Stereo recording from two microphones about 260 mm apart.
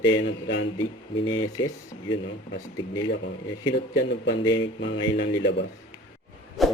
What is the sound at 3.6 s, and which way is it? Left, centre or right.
Speech, left.